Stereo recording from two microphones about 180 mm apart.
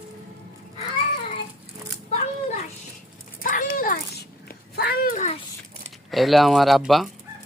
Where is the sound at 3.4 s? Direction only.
50° left (ahead or behind).